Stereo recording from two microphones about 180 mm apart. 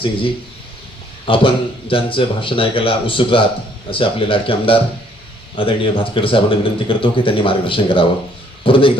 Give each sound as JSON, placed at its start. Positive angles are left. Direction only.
{"t": 1.2, "sound": "speech", "side_deg": 30}